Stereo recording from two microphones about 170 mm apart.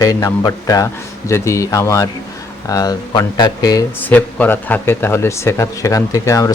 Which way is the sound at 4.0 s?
10° left (ahead or behind).